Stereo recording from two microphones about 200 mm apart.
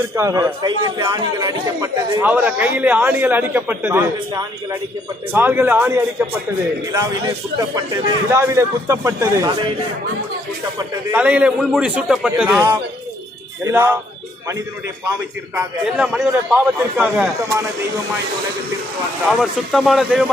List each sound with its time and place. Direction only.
0.2 s a man's voice: 15° right (ahead or behind)
10.8 s a man's voice: 5° right (ahead or behind)
15.5 s a man's voice: 5° right (ahead or behind)
19.2 s a man's voice: centre (ahead or behind)